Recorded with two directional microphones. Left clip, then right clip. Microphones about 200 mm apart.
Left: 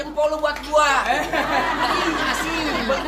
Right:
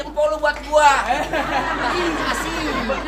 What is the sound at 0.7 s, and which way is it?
Speech, 25° right (ahead or behind).